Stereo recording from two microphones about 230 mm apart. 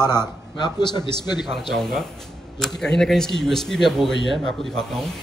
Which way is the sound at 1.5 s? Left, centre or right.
Centre.